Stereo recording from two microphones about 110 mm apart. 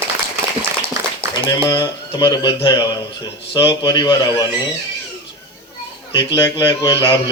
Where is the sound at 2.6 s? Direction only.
30° left (ahead or behind).